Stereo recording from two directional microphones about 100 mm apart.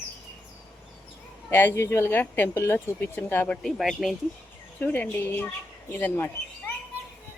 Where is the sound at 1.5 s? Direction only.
20° left (ahead or behind).